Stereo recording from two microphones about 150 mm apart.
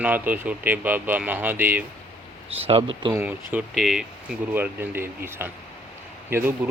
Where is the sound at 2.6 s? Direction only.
35° right (ahead or behind).